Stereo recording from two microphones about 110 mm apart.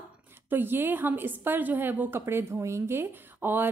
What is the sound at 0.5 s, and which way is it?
A woman's voice, 20° right (ahead or behind).